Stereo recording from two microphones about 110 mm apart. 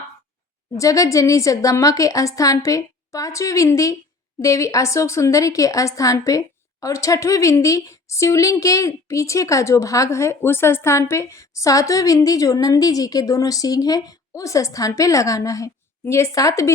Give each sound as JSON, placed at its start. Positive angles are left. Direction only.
{"t": 0.8, "sound": "a woman's voice", "side_deg": 30}